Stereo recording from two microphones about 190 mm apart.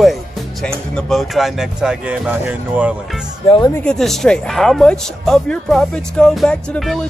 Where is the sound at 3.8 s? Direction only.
5° left (ahead or behind).